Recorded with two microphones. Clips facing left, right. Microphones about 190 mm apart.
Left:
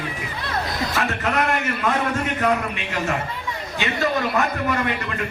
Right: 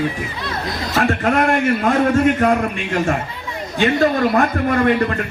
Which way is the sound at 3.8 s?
50° right (ahead or behind).